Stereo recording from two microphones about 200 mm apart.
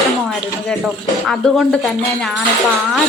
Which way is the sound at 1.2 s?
Centre (ahead or behind).